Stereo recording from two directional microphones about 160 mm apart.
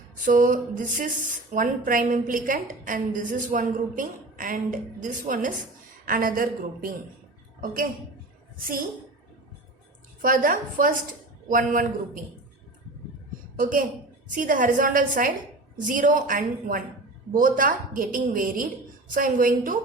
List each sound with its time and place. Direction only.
0.3 s a woman's voice: 55° right (ahead or behind)
10.2 s a woman's voice: 60° right (ahead or behind)
13.6 s a woman's voice: 60° right (ahead or behind)